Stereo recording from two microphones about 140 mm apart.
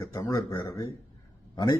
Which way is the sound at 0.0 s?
25° left (ahead or behind).